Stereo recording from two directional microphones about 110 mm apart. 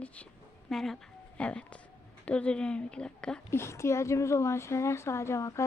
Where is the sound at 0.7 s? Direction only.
5° left (ahead or behind).